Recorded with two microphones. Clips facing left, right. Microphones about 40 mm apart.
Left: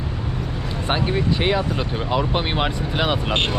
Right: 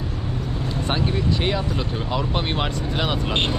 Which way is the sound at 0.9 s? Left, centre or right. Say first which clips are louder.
Left 3 dB; centre.